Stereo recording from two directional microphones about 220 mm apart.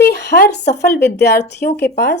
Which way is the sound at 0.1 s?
50° left (ahead or behind).